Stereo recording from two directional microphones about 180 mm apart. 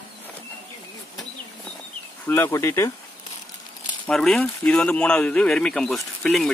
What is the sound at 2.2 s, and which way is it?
Speech, 10° left (ahead or behind).